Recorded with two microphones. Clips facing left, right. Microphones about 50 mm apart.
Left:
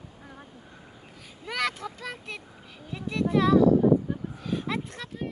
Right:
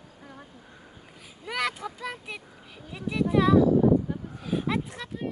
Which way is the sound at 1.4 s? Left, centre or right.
Centre.